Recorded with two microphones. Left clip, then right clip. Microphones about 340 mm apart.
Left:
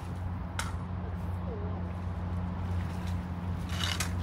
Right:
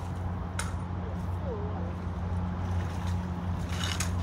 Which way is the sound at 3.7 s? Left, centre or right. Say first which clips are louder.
Left 1 dB; left.